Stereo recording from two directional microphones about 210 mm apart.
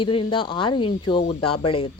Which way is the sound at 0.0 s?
25° left (ahead or behind).